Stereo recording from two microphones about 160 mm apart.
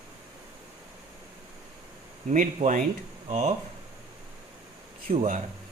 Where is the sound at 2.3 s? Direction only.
50° right (ahead or behind).